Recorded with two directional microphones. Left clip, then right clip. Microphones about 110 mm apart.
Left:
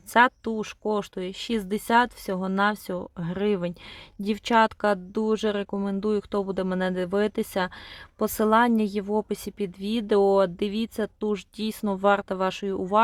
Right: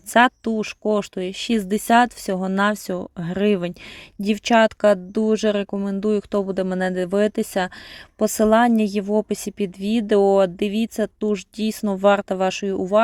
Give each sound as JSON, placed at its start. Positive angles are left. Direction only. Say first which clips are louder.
{"t": 0.1, "sound": "a woman's voice", "louder": "right 4 dB", "side_deg": -20}